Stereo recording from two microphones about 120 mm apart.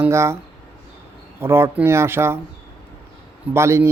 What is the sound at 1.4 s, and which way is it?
Speech, 20° right (ahead or behind).